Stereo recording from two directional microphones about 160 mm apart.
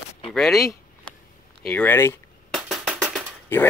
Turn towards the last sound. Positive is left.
turn(degrees=15)  # may be behind; listen again after turning